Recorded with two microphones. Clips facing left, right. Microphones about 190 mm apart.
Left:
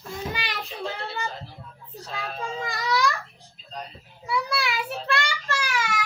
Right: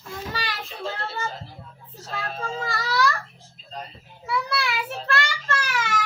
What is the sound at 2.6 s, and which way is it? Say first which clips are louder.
Babbling: right 1 dB; 15° left (ahead or behind).